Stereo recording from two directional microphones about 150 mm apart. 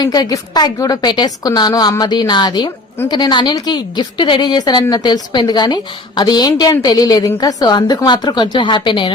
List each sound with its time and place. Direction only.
0.0 s a woman's voice: 25° left (ahead or behind)